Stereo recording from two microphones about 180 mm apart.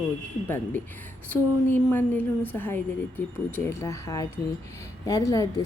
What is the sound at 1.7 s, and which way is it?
A woman's voice, 10° left (ahead or behind).